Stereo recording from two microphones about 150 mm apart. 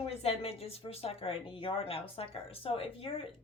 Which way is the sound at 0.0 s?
45° left (ahead or behind).